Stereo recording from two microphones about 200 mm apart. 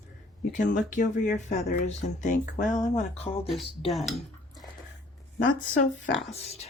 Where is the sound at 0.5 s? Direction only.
40° left (ahead or behind).